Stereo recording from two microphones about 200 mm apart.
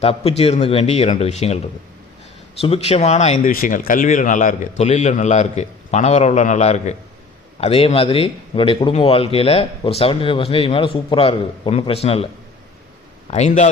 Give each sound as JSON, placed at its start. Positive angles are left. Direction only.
{"t": 0.0, "sound": "a man's voice", "side_deg": 30}
{"t": 13.3, "sound": "a man's voice", "side_deg": 35}